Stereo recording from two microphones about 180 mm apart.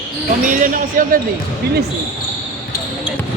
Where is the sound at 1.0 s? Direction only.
50° right (ahead or behind).